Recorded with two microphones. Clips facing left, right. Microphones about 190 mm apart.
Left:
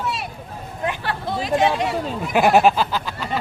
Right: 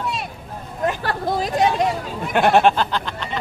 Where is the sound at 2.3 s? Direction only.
5° left (ahead or behind).